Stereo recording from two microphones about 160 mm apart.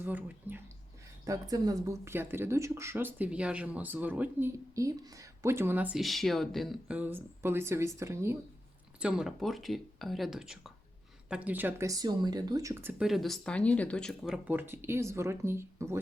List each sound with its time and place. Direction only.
0.0 s speech: 10° right (ahead or behind)
1.2 s speech: 20° right (ahead or behind)
9.0 s speech: 5° right (ahead or behind); by 12.9 s 20° right (ahead or behind)
12.9 s speech: 5° right (ahead or behind)
14.4 s speech: 10° right (ahead or behind)